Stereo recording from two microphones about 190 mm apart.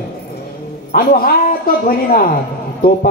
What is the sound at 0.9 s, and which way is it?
A man's voice, 50° left (ahead or behind).